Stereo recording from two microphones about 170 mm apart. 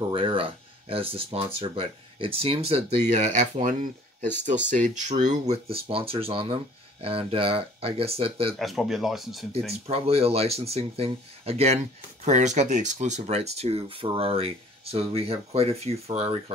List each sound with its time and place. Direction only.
0.1 s speech: 30° right (ahead or behind)
8.5 s speech: centre (ahead or behind)
9.7 s speech: 35° right (ahead or behind)